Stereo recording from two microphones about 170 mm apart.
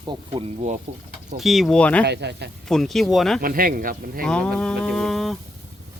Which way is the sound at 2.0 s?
80° right.